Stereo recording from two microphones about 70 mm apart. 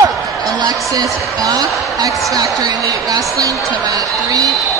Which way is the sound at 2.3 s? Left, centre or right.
Right.